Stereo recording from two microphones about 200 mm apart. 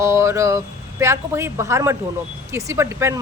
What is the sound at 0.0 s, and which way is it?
Speech, 15° right (ahead or behind).